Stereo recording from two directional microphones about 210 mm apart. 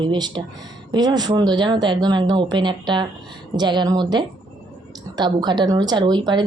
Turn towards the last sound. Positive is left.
turn(degrees=-20)  # may be behind; listen again after turning